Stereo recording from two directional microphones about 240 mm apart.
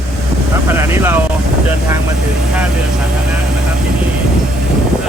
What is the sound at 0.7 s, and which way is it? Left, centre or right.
Speech, centre.